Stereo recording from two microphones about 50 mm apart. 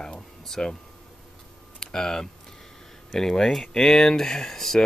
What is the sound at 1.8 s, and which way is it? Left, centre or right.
Speech, centre.